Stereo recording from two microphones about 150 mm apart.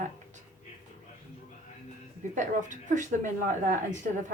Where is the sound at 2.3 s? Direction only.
60° right (ahead or behind).